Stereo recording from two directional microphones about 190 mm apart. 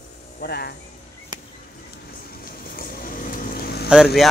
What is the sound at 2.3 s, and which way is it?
Vehicle, 50° left (ahead or behind).